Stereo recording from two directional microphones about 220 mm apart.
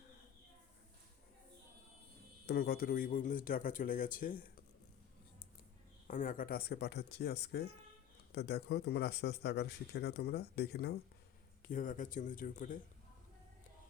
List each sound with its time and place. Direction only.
2.5 s speech: 45° left (ahead or behind)
6.1 s speech: 35° left (ahead or behind)